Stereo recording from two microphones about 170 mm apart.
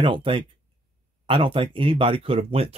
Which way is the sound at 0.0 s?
30° right (ahead or behind).